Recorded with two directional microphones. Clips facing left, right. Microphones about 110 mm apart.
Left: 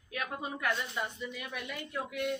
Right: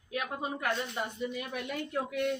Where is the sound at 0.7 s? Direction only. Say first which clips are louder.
Right 2 dB; 35° right (ahead or behind).